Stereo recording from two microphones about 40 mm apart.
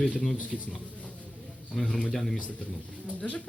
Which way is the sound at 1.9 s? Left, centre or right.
Left.